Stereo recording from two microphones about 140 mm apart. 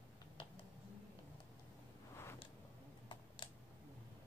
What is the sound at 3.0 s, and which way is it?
Typing, 35° left (ahead or behind).